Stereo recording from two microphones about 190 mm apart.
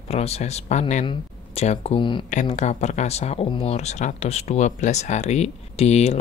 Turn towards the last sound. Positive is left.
turn(degrees=35)  # may be behind; listen again after turning